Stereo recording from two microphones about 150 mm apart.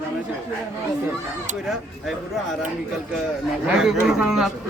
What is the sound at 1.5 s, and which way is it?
Speech, centre (ahead or behind).